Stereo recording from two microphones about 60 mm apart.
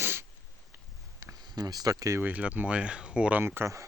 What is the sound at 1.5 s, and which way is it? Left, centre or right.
Speech, right.